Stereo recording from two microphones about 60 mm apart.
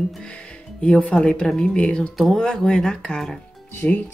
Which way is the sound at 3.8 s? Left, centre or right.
Left.